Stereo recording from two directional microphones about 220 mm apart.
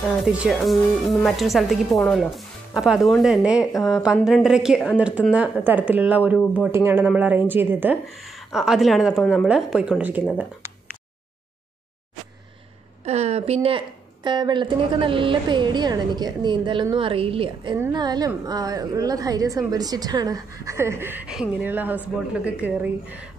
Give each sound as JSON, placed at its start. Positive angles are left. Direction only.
{"t": 0.0, "sound": "speech", "side_deg": -5}
{"t": 10.6, "sound": "a sound", "side_deg": -10}
{"t": 13.0, "sound": "a woman's voice", "side_deg": -30}